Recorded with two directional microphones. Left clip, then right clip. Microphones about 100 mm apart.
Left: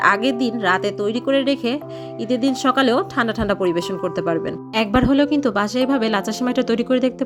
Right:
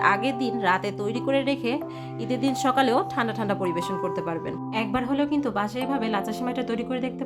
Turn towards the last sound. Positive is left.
turn(degrees=60)  # may be behind; listen again after turning